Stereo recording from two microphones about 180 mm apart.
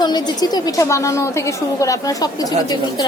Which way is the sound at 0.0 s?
25° left (ahead or behind).